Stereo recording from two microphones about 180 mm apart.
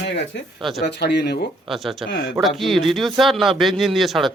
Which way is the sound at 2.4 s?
Centre (ahead or behind).